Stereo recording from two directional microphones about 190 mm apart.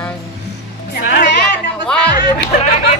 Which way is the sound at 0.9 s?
50° left (ahead or behind).